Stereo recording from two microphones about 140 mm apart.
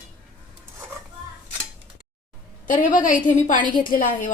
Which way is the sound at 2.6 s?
70° left (ahead or behind).